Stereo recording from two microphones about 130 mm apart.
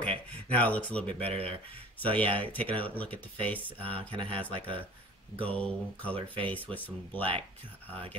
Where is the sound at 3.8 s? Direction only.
40° right (ahead or behind).